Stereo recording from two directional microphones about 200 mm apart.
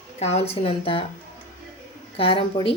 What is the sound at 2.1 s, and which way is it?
Speech, 25° left (ahead or behind).